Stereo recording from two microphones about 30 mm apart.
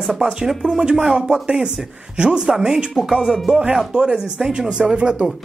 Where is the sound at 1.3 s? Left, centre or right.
Right.